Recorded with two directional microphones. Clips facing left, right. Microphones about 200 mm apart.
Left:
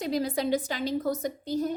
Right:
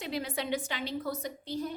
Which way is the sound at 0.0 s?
40° left (ahead or behind).